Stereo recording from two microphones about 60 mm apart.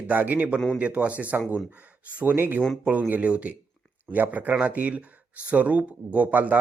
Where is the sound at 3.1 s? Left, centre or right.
Right.